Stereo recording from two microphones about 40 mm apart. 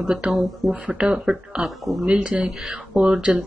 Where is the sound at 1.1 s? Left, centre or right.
Centre.